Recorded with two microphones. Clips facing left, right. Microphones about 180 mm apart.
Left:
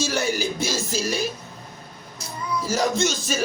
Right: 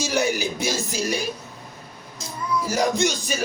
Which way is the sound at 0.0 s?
15° right (ahead or behind).